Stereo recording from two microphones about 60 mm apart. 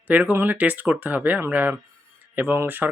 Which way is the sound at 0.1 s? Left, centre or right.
Right.